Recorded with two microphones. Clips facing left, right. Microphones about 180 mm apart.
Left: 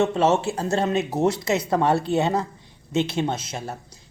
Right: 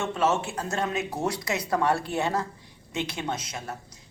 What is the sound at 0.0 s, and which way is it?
Speech, 30° left (ahead or behind).